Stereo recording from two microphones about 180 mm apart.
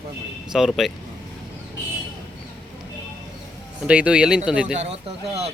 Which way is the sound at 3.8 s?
5° right (ahead or behind).